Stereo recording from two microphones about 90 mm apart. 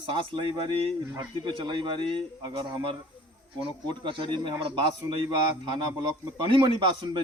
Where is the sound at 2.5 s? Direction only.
70° right (ahead or behind).